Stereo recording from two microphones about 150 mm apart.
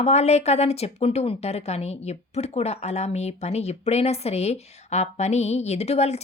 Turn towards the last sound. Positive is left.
turn(degrees=45)  # may be behind; listen again after turning